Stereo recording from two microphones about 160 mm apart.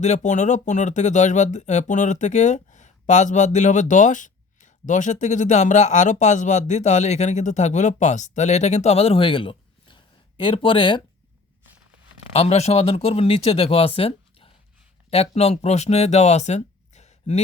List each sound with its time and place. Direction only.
0.0 s speech: 45° left (ahead or behind)
12.3 s speech: 40° left (ahead or behind)